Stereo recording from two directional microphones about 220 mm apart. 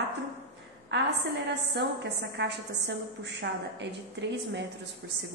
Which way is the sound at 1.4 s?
50° right (ahead or behind).